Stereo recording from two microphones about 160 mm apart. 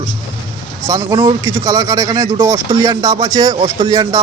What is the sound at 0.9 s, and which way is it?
Speech, 20° right (ahead or behind).